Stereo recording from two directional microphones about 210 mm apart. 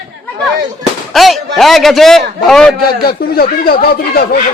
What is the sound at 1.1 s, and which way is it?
A man's voice, centre (ahead or behind).